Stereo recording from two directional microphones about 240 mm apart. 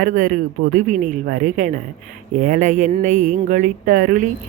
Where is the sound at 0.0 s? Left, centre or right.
Right.